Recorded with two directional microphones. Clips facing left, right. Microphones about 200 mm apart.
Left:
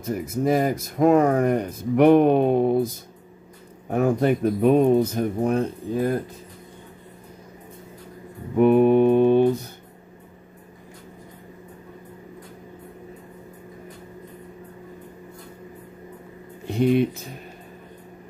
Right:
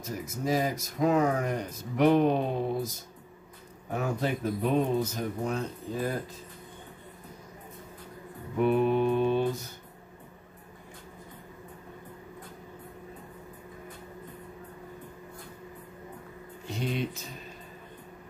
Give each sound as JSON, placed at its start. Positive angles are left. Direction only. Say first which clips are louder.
{"t": 0.0, "sound": "speech", "louder": "left 9 dB", "side_deg": 55}
{"t": 3.9, "sound": "speech", "louder": "left 10 dB", "side_deg": 55}
{"t": 8.5, "sound": "mantra", "louder": "left 9 dB", "side_deg": 55}
{"t": 16.6, "sound": "speech", "louder": "left 12 dB", "side_deg": 55}